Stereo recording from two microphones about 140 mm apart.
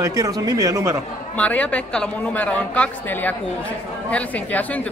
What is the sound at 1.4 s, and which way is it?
A woman's voice, 10° left (ahead or behind).